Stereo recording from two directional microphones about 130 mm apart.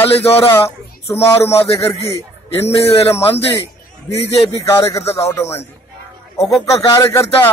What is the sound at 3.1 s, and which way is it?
Speech, 50° left (ahead or behind).